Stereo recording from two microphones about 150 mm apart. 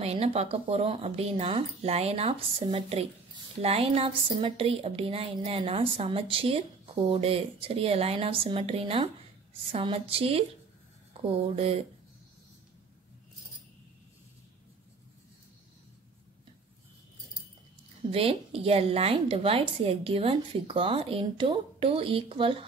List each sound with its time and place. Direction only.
0.0 s a woman's voice: 45° right (ahead or behind)
18.1 s a woman's voice: 40° right (ahead or behind)